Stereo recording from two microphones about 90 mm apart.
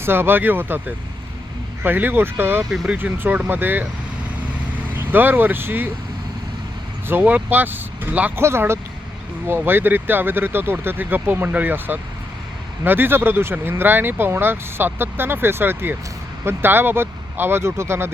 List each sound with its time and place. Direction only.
0.0 s speech: 25° right (ahead or behind)
2.6 s speech: 10° right (ahead or behind)
5.1 s speech: 20° right (ahead or behind)
7.1 s speech: 20° right (ahead or behind)